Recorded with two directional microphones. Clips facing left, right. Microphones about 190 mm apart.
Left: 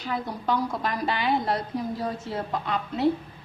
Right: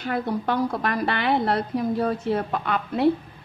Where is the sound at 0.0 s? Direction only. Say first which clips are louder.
Right 4 dB; 60° right (ahead or behind).